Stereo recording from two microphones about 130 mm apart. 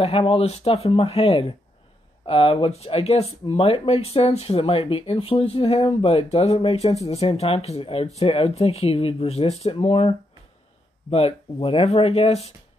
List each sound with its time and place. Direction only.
0.0 s speech: 45° left (ahead or behind)